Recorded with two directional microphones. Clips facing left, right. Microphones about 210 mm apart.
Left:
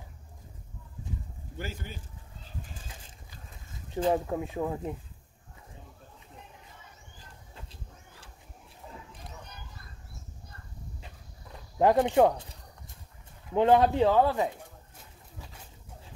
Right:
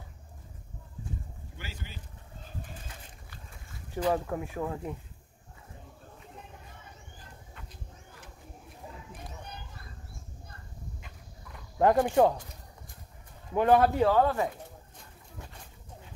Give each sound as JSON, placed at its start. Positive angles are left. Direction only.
{"t": 1.6, "sound": "speech", "side_deg": 50}
{"t": 3.7, "sound": "speech", "side_deg": 20}
{"t": 7.5, "sound": "a sound", "side_deg": 30}
{"t": 11.8, "sound": "speech", "side_deg": 20}
{"t": 13.6, "sound": "speech", "side_deg": 20}